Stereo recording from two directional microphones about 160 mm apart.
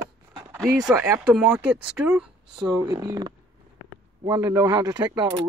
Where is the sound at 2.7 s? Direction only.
20° right (ahead or behind).